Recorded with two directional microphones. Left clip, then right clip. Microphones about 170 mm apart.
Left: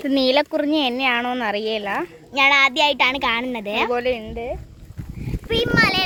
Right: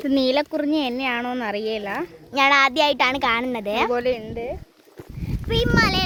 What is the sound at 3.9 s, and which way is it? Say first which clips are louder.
Speech: left 1 dB; 30° right (ahead or behind).